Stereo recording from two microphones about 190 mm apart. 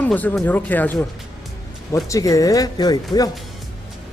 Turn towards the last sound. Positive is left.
turn(degrees=20)  # may be behind; listen again after turning